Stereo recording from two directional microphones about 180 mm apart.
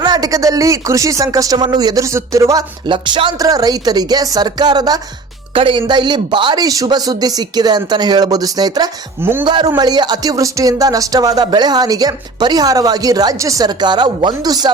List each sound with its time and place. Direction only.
0.0 s speech: 20° right (ahead or behind)